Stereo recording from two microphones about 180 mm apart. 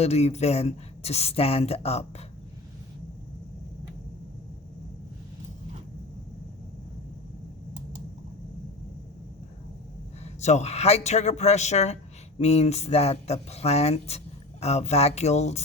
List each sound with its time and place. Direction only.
0.0 s speech: 35° left (ahead or behind)
10.2 s speech: 40° left (ahead or behind)